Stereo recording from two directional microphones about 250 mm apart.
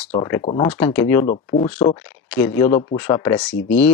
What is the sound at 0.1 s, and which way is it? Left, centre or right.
Speech, centre.